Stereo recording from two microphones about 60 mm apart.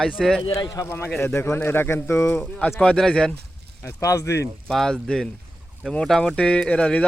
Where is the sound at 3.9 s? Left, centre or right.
Left.